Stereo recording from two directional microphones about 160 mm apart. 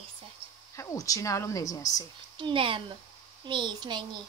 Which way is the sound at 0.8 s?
20° left (ahead or behind).